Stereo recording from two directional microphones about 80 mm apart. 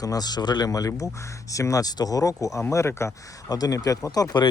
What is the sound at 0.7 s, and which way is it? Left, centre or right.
Speech, left.